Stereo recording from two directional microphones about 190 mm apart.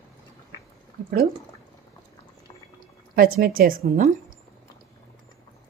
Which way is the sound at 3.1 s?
50° right (ahead or behind).